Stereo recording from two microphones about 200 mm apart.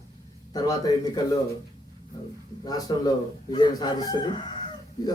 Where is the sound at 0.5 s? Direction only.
20° left (ahead or behind).